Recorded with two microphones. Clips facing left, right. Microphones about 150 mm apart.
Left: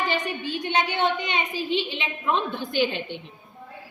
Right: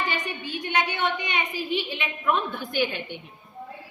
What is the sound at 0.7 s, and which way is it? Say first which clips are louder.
A woman's voice: left 2 dB; 25° left (ahead or behind).